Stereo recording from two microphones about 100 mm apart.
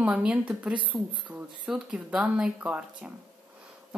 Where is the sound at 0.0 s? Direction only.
10° right (ahead or behind).